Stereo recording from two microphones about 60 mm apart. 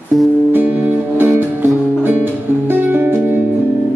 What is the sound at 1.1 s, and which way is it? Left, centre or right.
Music, right.